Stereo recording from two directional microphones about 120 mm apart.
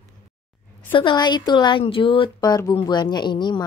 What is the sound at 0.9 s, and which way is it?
A woman's voice, 40° left (ahead or behind).